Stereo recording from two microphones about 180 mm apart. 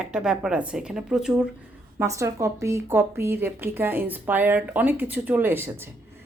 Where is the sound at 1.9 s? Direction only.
15° right (ahead or behind).